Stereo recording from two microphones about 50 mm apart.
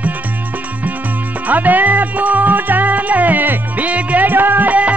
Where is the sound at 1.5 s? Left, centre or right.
Right.